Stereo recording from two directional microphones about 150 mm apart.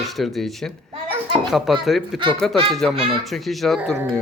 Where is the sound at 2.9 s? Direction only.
40° right (ahead or behind).